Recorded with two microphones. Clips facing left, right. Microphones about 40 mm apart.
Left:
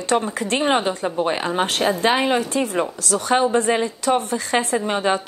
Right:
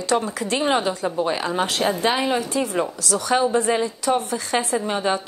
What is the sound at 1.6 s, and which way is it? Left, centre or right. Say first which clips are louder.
A woman's voice: left 2 dB; left.